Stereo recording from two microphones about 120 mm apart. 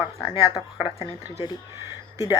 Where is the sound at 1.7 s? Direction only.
25° right (ahead or behind).